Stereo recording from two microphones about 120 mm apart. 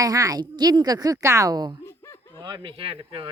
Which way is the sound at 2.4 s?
40° right (ahead or behind).